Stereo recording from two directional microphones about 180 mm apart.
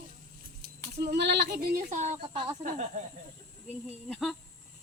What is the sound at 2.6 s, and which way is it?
Speech, 40° right (ahead or behind).